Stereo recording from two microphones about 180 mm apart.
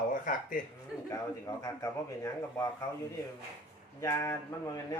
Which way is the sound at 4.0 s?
15° left (ahead or behind).